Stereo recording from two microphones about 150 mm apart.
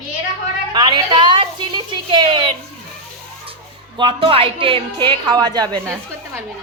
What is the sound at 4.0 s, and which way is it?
A woman's voice, 35° right (ahead or behind).